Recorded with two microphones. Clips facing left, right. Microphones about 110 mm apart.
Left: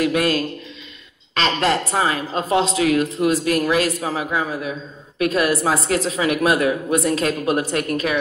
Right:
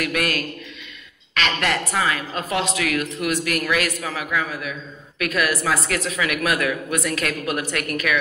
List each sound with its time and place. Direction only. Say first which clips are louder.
0.0 s a man's voice: left 5 dB; 25° left (ahead or behind)